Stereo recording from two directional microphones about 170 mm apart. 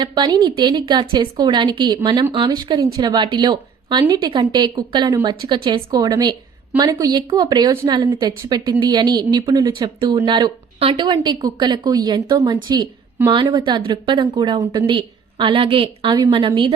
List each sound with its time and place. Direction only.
0.0 s a woman's voice: 25° right (ahead or behind)